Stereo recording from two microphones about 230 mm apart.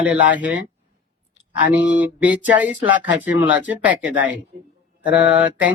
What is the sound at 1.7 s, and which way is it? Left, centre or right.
Speech, centre.